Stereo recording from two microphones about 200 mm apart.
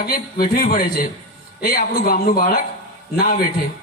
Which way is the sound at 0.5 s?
45° left (ahead or behind).